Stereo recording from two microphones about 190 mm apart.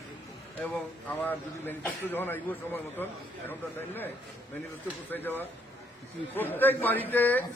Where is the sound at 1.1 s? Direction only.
10° left (ahead or behind).